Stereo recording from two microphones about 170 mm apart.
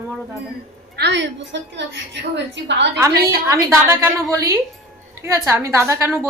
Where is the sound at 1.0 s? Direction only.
85° right.